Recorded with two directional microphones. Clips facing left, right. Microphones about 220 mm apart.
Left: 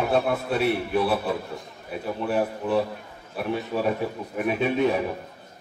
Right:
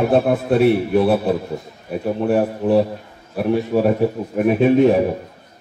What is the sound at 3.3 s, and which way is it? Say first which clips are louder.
A man's voice: right 9 dB; 50° right (ahead or behind).